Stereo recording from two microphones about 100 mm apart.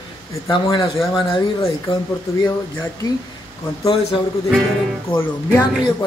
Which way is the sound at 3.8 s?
80° left.